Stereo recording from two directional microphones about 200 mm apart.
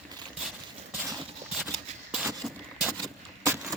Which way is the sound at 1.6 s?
Centre (ahead or behind).